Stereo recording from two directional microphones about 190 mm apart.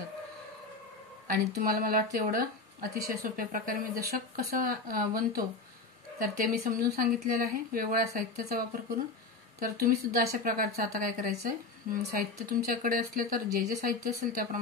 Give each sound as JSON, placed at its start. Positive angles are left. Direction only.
{"t": 1.3, "sound": "a woman's voice", "side_deg": -50}